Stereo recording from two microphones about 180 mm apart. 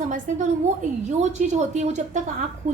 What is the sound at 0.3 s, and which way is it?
A woman's voice, 45° right (ahead or behind).